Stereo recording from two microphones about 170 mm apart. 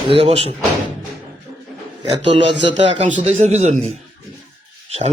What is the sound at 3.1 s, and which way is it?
A man's voice, 45° right (ahead or behind).